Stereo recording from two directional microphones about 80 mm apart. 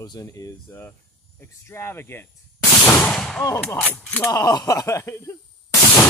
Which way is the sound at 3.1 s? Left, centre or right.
Centre.